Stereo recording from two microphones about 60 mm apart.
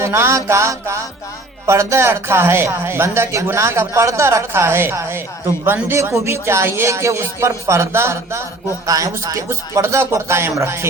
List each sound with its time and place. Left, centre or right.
0.0 s speech: right
8.9 s speech: right
9.5 s speech: right